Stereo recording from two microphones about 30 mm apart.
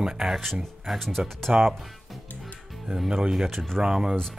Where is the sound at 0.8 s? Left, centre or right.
Centre.